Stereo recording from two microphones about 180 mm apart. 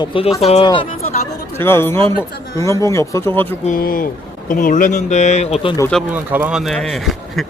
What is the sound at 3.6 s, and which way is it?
A man's voice, 50° left (ahead or behind).